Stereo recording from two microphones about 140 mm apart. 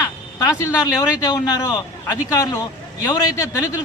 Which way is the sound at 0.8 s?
25° left (ahead or behind).